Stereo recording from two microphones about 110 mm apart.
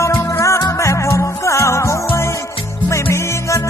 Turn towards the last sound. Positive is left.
turn(degrees=25)  # may be behind; listen again after turning